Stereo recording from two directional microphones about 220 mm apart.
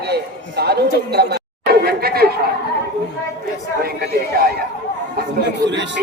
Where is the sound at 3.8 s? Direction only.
45° right (ahead or behind).